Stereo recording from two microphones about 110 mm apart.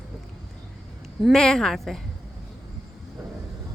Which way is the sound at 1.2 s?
5° left (ahead or behind).